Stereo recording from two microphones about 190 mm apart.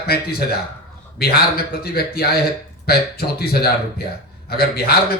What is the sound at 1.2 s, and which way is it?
A man's voice, 55° left (ahead or behind).